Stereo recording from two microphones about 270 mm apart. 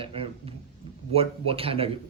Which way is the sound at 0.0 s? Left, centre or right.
Right.